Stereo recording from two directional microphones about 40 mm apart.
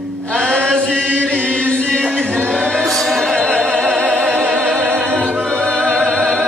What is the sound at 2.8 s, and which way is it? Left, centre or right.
Music, centre.